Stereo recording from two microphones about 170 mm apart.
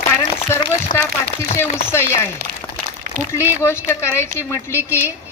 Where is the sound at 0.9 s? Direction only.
55° left (ahead or behind).